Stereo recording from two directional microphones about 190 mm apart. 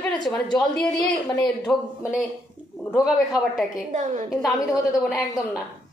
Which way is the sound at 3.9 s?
40° right (ahead or behind).